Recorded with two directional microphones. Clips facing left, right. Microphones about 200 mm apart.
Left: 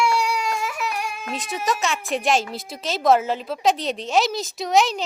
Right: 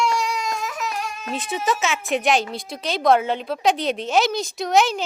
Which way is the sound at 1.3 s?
Centre (ahead or behind).